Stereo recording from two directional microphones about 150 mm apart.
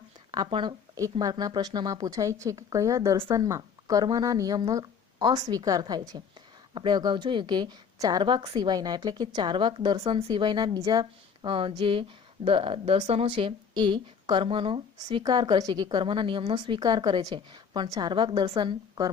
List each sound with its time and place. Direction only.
0.3 s a woman's voice: 30° right (ahead or behind)
11.4 s a woman's voice: 35° right (ahead or behind)